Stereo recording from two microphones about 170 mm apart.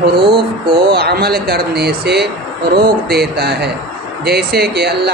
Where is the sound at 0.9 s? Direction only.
70° right (ahead or behind).